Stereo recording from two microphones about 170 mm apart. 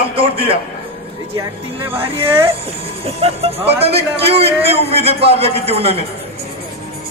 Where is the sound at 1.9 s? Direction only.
35° right (ahead or behind).